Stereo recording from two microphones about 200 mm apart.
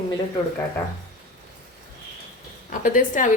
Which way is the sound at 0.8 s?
10° left (ahead or behind).